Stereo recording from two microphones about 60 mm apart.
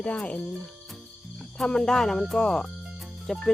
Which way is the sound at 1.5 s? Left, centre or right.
Centre.